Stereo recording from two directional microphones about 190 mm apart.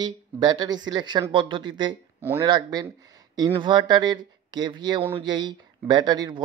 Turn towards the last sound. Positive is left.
turn(degrees=-20)  # may be behind; listen again after turning